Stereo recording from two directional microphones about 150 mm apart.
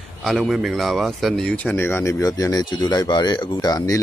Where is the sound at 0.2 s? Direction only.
Centre (ahead or behind).